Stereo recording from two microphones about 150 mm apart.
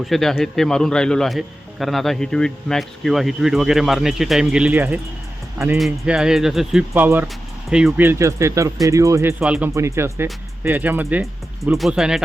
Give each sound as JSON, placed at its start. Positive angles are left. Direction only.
{"t": 0.0, "sound": "speech", "side_deg": 0}
{"t": 9.4, "sound": "speech", "side_deg": -10}